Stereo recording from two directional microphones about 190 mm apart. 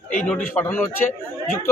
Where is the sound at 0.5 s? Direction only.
10° left (ahead or behind).